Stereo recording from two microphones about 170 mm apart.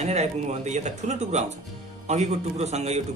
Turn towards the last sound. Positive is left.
turn(degrees=-40)  # may be behind; listen again after turning